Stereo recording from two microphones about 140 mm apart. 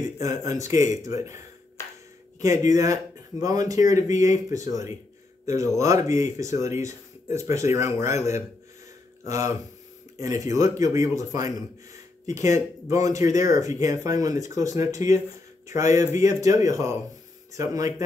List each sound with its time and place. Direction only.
0.6 s speech: 20° right (ahead or behind)
2.4 s speech: 25° right (ahead or behind)